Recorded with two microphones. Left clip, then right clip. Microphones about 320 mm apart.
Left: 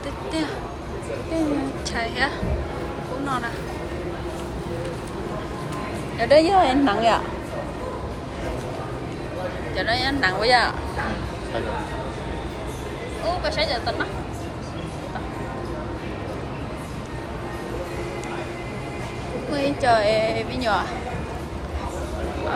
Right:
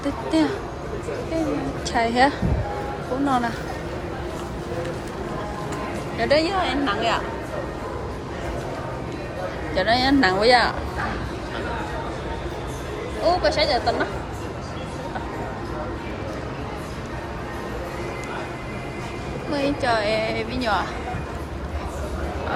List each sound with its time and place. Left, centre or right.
0.3 s a woman's voice: centre
1.9 s a woman's voice: centre
6.1 s a woman's voice: centre
9.7 s a woman's voice: centre
13.2 s a woman's voice: centre
19.5 s a woman's voice: centre